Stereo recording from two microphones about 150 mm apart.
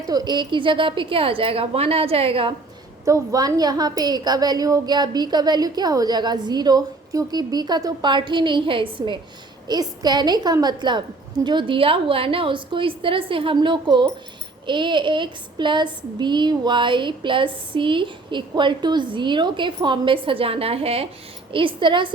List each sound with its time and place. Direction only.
0.1 s a woman's voice: 25° right (ahead or behind)
3.0 s a woman's voice: 25° right (ahead or behind)